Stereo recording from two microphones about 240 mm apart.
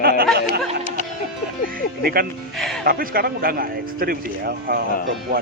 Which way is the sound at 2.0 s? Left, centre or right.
Right.